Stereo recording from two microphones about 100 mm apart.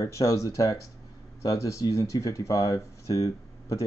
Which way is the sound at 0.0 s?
35° left (ahead or behind).